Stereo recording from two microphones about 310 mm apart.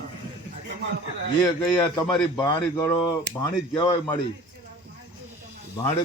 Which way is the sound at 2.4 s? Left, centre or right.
Centre.